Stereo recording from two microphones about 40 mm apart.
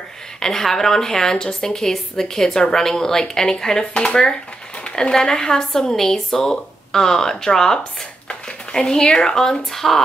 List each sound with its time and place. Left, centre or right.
0.4 s a woman's voice: centre